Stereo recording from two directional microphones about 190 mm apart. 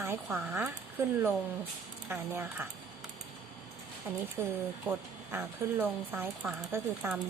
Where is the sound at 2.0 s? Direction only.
10° right (ahead or behind).